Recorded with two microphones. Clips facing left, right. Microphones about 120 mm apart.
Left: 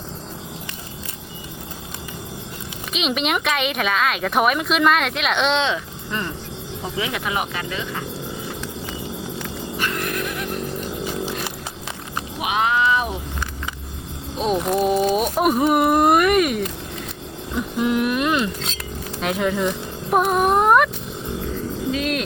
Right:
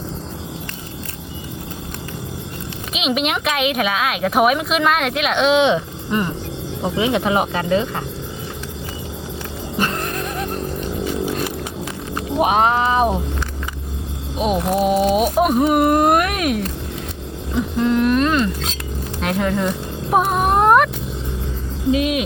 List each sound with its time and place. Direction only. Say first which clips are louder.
2.9 s speech: right 2 dB; 5° right (ahead or behind)
5.7 s speech: right 7 dB; 20° right (ahead or behind); by 8.0 s 40° right (ahead or behind)
9.7 s a sound: right 3 dB; 35° right (ahead or behind)
12.4 s speech: right 5 dB; 40° right (ahead or behind)
14.3 s speech: right 2 dB; 5° right (ahead or behind)
17.7 s speech: right 4 dB; 10° left (ahead or behind)
20.1 s a sound: right 1 dB; centre (ahead or behind)
21.9 s speech: right 5 dB; 5° right (ahead or behind)